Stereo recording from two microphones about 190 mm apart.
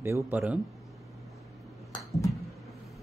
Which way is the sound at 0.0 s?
15° right (ahead or behind).